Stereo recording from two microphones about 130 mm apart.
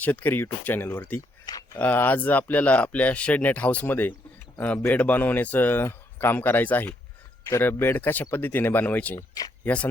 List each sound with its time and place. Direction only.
0.0 s speech: 15° left (ahead or behind)
1.5 s speech: 25° left (ahead or behind)
1.8 s speech: 15° left (ahead or behind)